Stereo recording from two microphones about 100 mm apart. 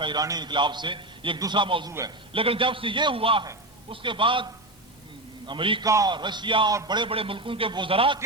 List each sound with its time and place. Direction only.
0.0 s a man's voice: 45° right (ahead or behind)
1.9 s a man's voice: 30° right (ahead or behind)
2.3 s a man's voice: 65° right (ahead or behind)
5.5 s a man's voice: 60° right (ahead or behind)
5.8 s a man's voice: 35° right (ahead or behind)
6.1 s a man's voice: 50° right (ahead or behind)
6.7 s a man's voice: 45° right (ahead or behind)
7.1 s a man's voice: 65° right (ahead or behind)